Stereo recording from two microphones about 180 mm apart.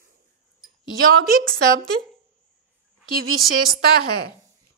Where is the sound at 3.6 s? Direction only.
55° right (ahead or behind).